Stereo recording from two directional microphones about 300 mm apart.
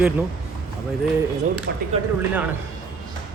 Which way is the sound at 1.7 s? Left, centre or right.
Right.